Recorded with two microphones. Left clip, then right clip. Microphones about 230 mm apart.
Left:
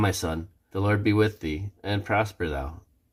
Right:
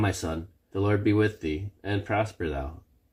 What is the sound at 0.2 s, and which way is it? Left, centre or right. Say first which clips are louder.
Speech: left 2 dB; left.